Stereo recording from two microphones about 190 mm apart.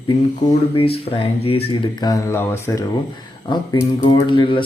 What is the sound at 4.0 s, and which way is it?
Speech, 25° left (ahead or behind).